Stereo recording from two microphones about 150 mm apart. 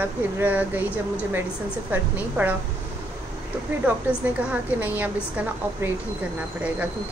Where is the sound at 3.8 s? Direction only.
10° right (ahead or behind).